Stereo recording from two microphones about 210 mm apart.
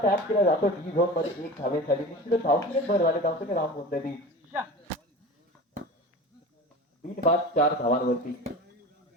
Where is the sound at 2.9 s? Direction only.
45° left (ahead or behind).